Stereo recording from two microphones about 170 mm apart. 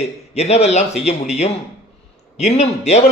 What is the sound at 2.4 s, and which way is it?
Speech, 40° left (ahead or behind).